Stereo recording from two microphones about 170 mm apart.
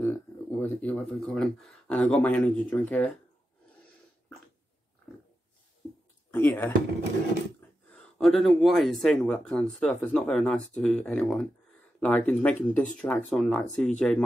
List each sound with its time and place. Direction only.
0.0 s speech: 15° left (ahead or behind)
5.8 s a sound: 30° left (ahead or behind)
6.3 s speech: 10° left (ahead or behind)
7.9 s speech: 5° left (ahead or behind)